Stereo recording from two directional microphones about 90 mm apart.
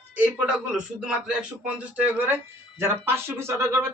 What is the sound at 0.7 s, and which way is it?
Speech, 10° right (ahead or behind).